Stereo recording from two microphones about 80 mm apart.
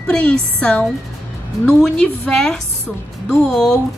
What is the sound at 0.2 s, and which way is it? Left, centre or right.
A woman's voice, centre.